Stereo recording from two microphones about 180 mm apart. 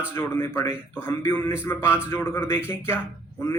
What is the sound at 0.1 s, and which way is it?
Speech, 15° left (ahead or behind).